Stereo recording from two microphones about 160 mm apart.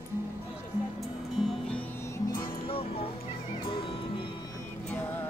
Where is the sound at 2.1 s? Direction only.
25° left (ahead or behind).